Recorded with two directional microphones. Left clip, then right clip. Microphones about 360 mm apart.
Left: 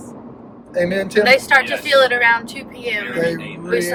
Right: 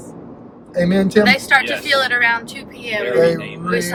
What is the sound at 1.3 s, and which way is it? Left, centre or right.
Speech, centre.